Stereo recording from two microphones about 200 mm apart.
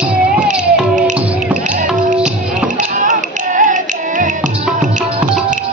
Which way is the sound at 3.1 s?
40° right (ahead or behind).